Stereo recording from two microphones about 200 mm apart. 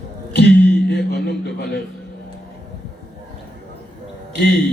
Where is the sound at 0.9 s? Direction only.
55° left (ahead or behind).